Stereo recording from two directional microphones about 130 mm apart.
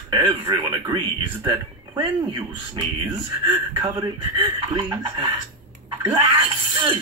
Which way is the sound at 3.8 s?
40° right (ahead or behind).